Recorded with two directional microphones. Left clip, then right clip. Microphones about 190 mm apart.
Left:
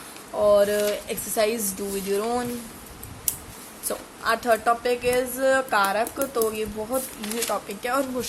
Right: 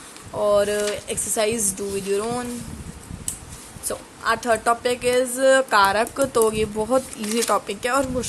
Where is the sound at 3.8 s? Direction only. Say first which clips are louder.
Right 2 dB; 10° right (ahead or behind); by 7.8 s 30° right (ahead or behind).